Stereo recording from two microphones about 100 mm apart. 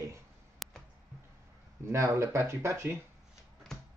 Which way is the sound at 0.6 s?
Centre (ahead or behind).